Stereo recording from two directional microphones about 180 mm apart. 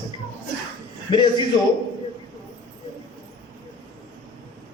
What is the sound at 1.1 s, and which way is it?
Speech, 25° left (ahead or behind).